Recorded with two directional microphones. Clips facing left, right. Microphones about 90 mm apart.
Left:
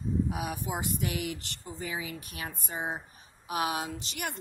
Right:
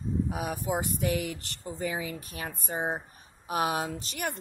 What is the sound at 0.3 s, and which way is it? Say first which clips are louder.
Speech: right 3 dB; 40° right (ahead or behind).